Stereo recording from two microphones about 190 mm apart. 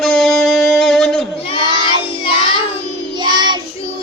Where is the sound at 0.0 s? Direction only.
Centre (ahead or behind).